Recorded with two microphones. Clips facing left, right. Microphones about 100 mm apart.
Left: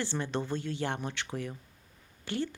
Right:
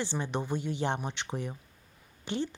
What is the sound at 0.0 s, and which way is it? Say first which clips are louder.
Speech: even; 15° right (ahead or behind).